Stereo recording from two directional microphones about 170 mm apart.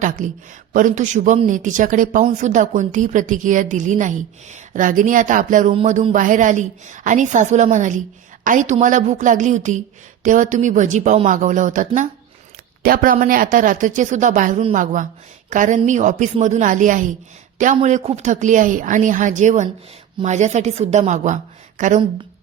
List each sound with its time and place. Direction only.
0.7 s a woman's voice: 50° right (ahead or behind)
12.8 s a woman's voice: 60° right (ahead or behind)